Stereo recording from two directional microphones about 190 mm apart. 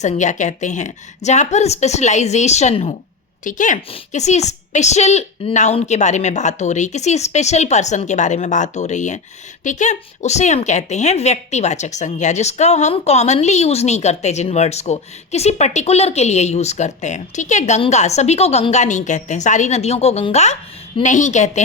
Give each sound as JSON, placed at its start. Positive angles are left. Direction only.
{"t": 0.0, "sound": "a woman's voice", "side_deg": 40}